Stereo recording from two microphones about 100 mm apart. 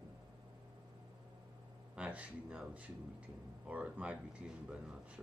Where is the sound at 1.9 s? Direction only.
10° right (ahead or behind).